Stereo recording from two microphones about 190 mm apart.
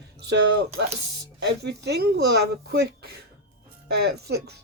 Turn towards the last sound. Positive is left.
turn(degrees=-60)  # may be behind; listen again after turning